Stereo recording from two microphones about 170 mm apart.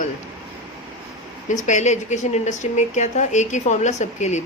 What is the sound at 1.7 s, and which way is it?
Speech, 45° left (ahead or behind).